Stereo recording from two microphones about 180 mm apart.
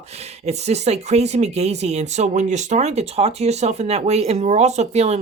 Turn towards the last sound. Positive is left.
turn(degrees=-35)  # may be behind; listen again after turning